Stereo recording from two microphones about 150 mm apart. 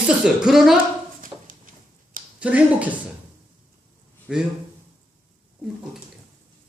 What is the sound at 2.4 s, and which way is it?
Speech, 10° right (ahead or behind).